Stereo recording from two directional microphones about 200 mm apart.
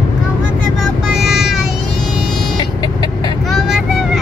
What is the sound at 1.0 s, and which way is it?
Child singing, centre (ahead or behind).